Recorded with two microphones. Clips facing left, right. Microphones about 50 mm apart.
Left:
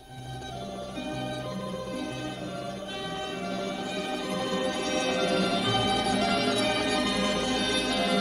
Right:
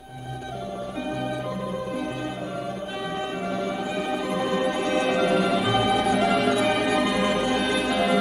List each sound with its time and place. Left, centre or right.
3.4 s music: centre